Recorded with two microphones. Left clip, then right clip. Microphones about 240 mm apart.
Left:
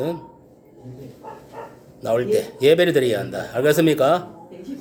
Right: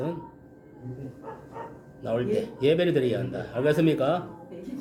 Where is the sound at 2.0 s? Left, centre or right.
Centre.